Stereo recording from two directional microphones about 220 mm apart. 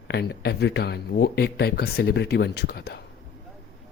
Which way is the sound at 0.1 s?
50° left (ahead or behind).